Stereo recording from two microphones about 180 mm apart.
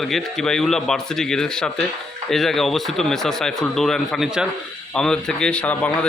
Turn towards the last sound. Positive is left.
turn(degrees=5)  # may be behind; listen again after turning